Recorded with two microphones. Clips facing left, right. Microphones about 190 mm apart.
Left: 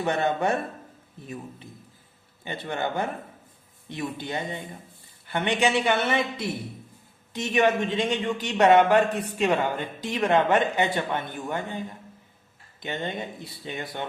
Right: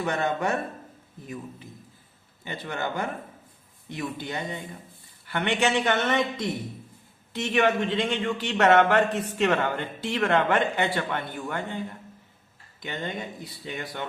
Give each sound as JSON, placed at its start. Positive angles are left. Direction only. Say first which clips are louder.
{"t": 0.0, "sound": "speech", "louder": "left 2 dB", "side_deg": 30}
{"t": 2.4, "sound": "speech", "louder": "left 2 dB", "side_deg": 25}
{"t": 7.3, "sound": "speech", "louder": "left 1 dB", "side_deg": 15}